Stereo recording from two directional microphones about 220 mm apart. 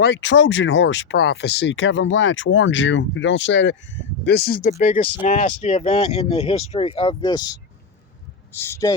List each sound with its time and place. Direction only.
0.0 s speech: 55° left (ahead or behind)
5.2 s speech: 30° left (ahead or behind)
8.5 s speech: 10° left (ahead or behind)